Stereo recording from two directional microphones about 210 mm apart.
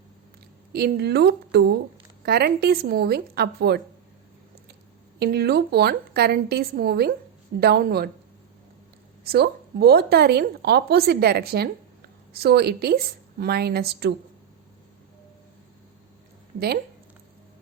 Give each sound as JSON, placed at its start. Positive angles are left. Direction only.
{"t": 0.7, "sound": "a woman's voice", "side_deg": -50}
{"t": 5.2, "sound": "a woman's voice", "side_deg": -50}
{"t": 9.2, "sound": "a woman's voice", "side_deg": -50}